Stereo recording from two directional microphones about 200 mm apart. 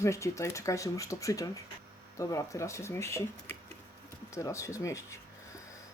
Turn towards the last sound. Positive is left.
turn(degrees=15)  # may be behind; listen again after turning